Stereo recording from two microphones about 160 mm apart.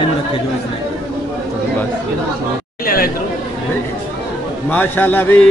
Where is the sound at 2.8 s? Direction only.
65° left (ahead or behind).